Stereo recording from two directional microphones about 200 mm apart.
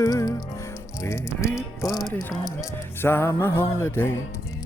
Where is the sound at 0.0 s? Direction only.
20° left (ahead or behind).